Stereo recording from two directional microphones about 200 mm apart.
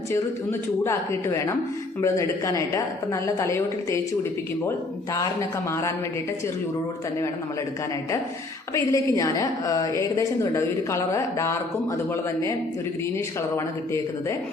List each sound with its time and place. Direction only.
0.9 s a woman's voice: 15° left (ahead or behind)
5.1 s a woman's voice: 15° left (ahead or behind)
8.7 s a woman's voice: 15° left (ahead or behind)